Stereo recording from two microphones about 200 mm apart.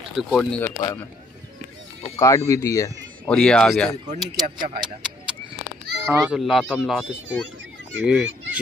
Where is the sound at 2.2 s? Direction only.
15° left (ahead or behind).